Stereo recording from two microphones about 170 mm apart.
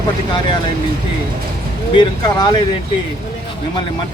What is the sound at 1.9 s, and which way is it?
Speech, 25° left (ahead or behind).